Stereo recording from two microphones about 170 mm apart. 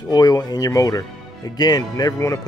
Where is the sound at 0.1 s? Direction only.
25° left (ahead or behind).